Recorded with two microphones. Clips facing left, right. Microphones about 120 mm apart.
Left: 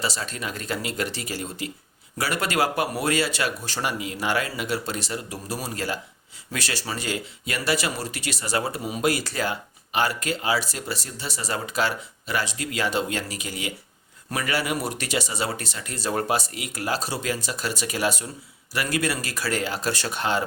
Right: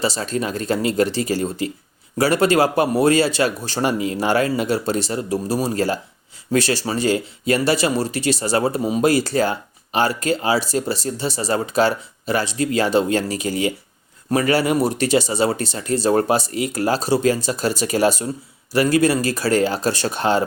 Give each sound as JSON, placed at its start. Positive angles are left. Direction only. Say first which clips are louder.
{"t": 0.0, "sound": "speech", "louder": "right 8 dB", "side_deg": -35}